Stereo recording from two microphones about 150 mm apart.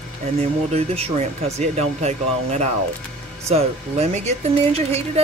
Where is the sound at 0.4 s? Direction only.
45° right (ahead or behind).